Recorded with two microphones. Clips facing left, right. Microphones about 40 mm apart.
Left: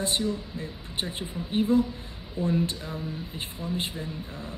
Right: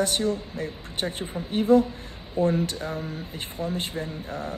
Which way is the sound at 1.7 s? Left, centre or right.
Right.